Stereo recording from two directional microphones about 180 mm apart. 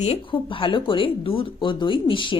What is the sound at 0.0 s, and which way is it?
Speech, 30° left (ahead or behind).